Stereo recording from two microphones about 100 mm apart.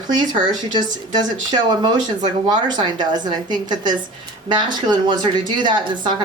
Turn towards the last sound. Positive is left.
turn(degrees=-50)  # may be behind; listen again after turning